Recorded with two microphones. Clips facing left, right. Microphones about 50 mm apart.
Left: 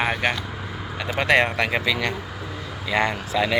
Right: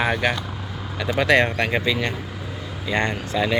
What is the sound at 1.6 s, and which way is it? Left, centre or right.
Speech, left.